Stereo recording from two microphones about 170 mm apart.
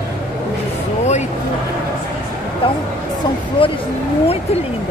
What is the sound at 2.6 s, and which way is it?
Speech, 30° left (ahead or behind).